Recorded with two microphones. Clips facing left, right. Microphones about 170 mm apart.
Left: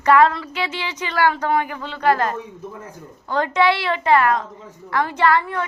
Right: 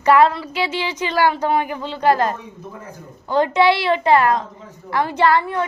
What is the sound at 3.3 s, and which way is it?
A woman's voice, 25° right (ahead or behind).